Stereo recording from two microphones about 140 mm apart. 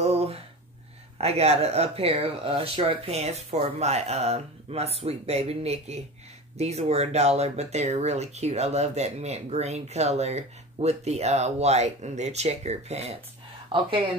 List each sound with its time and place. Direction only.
0.0 s gasp: 45° right (ahead or behind)
1.1 s speech: 50° right (ahead or behind)
13.7 s speech: 40° right (ahead or behind)